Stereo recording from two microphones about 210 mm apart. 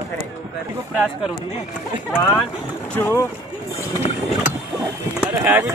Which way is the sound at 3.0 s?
10° left (ahead or behind).